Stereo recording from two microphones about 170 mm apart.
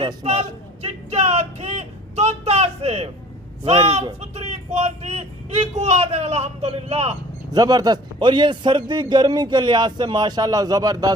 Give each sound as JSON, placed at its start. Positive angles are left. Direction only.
{"t": 0.2, "sound": "a sound", "side_deg": -40}
{"t": 4.2, "sound": "speech", "side_deg": -40}
{"t": 7.5, "sound": "a man's voice", "side_deg": -25}